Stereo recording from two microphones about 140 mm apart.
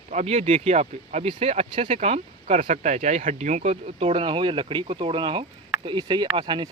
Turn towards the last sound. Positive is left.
turn(degrees=-35)  # may be behind; listen again after turning